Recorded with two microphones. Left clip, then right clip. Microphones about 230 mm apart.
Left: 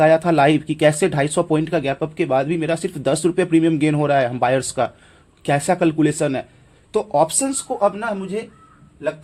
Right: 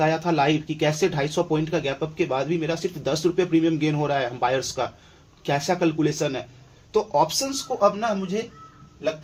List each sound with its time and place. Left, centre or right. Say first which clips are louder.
0.0 s speech: left 7 dB; left